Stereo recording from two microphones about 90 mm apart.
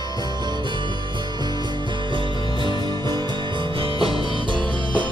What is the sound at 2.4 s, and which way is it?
Music, 60° left (ahead or behind).